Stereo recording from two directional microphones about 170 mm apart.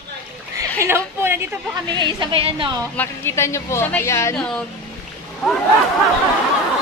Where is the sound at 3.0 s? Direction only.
15° left (ahead or behind).